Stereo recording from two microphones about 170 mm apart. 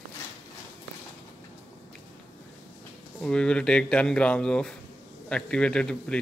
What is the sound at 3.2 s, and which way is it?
Speech, 5° left (ahead or behind).